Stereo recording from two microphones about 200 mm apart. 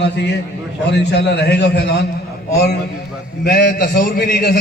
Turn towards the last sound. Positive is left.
turn(degrees=45)  # may be behind; listen again after turning